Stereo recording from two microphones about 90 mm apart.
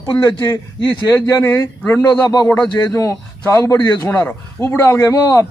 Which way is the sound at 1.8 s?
15° left (ahead or behind).